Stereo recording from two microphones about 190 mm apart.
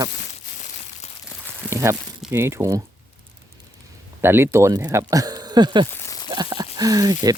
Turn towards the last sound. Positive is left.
turn(degrees=-20)  # may be behind; listen again after turning